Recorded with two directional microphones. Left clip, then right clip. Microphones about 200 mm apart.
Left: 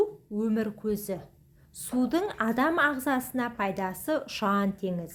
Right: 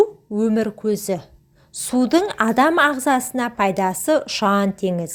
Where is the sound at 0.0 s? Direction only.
35° right (ahead or behind).